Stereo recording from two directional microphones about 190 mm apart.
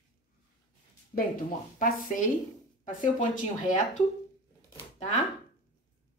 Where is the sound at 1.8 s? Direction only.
45° left (ahead or behind).